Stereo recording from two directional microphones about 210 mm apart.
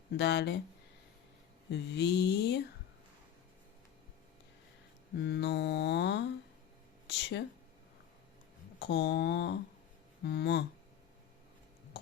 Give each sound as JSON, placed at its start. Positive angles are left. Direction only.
{"t": 0.2, "sound": "mantra", "side_deg": 55}
{"t": 1.7, "sound": "mantra", "side_deg": 55}
{"t": 5.2, "sound": "mantra", "side_deg": 55}
{"t": 7.1, "sound": "speech", "side_deg": 55}
{"t": 8.8, "sound": "mantra", "side_deg": 55}